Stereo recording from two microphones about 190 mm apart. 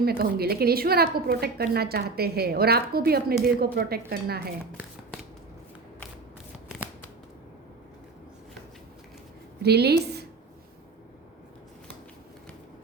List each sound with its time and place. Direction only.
0.2 s a woman's voice: 55° right (ahead or behind)
9.6 s a woman's voice: 60° right (ahead or behind)